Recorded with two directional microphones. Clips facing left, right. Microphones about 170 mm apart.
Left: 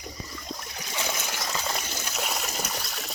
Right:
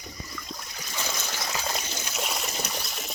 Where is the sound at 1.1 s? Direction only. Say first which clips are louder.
Left 1 dB; 10° left (ahead or behind).